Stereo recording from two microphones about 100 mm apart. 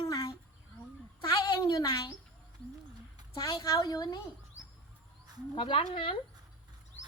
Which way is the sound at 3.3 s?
40° left (ahead or behind).